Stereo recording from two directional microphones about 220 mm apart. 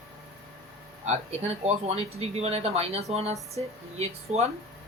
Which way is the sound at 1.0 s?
30° right (ahead or behind).